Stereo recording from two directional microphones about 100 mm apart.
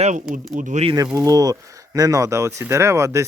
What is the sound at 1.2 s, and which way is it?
Speech, 35° right (ahead or behind).